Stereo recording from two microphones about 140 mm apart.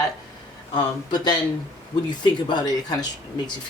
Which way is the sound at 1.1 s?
30° left (ahead or behind).